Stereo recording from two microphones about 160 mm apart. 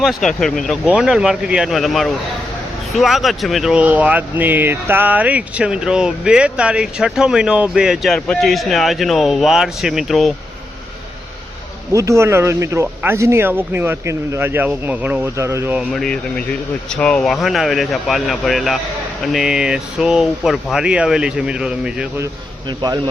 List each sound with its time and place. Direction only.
0.0 s speech: centre (ahead or behind)
11.9 s speech: 20° right (ahead or behind)
15.9 s speech: centre (ahead or behind)